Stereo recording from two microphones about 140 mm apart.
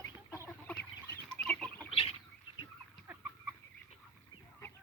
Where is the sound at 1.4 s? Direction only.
5° left (ahead or behind).